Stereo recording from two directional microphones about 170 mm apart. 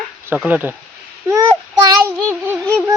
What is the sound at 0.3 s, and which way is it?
Speech, 10° right (ahead or behind).